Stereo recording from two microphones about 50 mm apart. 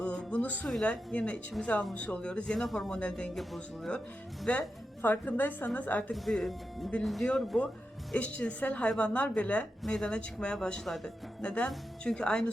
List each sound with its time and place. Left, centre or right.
0.0 s music: centre
0.9 s speech: left
2.6 s speech: centre
2.9 s speech: centre
4.5 s speech: left
5.0 s a woman's voice: left
6.1 s speech: centre
8.1 s speech: left
9.8 s a woman's voice: centre